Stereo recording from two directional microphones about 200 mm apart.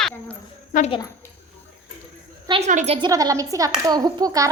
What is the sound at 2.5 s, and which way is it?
Speech, 35° right (ahead or behind).